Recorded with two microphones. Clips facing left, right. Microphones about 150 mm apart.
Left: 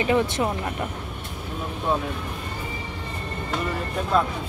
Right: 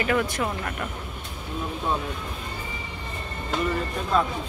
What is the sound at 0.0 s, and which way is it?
Speech, 25° left (ahead or behind).